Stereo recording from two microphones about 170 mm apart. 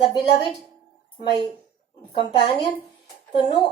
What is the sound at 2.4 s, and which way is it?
Speech, 30° left (ahead or behind).